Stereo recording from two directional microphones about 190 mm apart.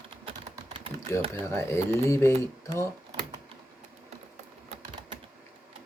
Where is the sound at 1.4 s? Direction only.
15° left (ahead or behind).